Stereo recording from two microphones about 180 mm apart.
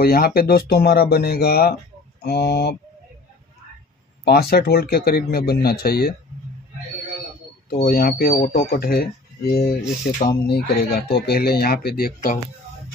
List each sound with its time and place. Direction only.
0.0 s speech: 55° left (ahead or behind)
4.2 s speech: 60° left (ahead or behind)
7.8 s speech: 55° left (ahead or behind)